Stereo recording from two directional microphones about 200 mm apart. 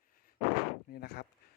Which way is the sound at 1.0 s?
55° left (ahead or behind).